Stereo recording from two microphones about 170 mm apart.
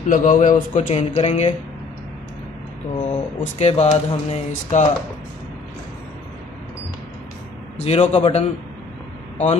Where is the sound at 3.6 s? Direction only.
40° left (ahead or behind).